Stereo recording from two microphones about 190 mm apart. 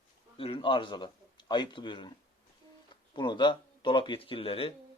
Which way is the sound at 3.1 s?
25° left (ahead or behind).